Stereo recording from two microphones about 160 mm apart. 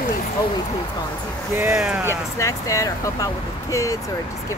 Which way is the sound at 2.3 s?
20° left (ahead or behind).